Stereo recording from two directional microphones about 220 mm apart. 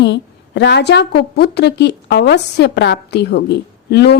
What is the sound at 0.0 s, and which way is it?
A woman's voice, 50° left (ahead or behind).